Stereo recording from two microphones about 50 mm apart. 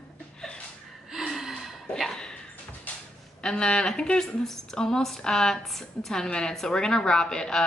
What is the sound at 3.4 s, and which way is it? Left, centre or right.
A woman's voice, centre.